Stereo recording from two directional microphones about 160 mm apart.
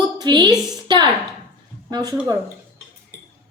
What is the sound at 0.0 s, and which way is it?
A woman's voice, 25° right (ahead or behind).